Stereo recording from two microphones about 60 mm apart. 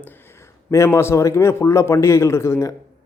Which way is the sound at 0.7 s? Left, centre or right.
Left.